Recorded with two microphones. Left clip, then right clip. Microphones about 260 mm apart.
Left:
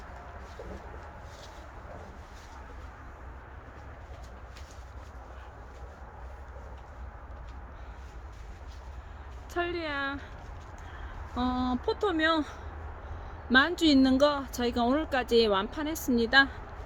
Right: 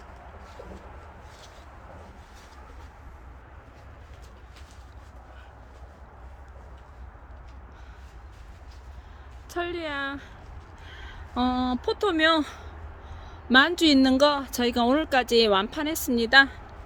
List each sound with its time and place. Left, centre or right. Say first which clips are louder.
9.5 s speech: right 2 dB; right
11.3 s speech: right 5 dB; right